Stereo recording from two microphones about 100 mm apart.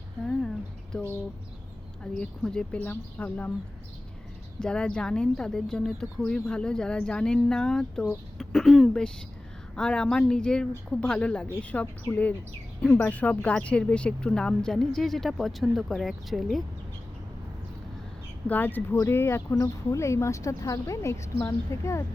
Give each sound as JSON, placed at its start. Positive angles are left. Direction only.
{"t": 0.9, "sound": "speech", "side_deg": 10}
{"t": 2.1, "sound": "speech", "side_deg": 10}
{"t": 4.6, "sound": "speech", "side_deg": 10}
{"t": 18.4, "sound": "speech", "side_deg": 15}